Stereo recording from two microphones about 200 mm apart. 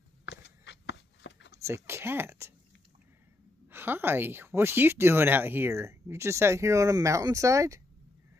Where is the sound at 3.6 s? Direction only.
10° right (ahead or behind).